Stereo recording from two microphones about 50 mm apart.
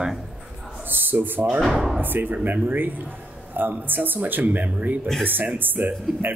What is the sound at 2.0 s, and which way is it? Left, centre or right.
Speech, right.